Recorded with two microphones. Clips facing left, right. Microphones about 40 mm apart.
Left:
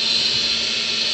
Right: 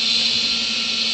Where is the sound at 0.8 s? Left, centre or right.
Left.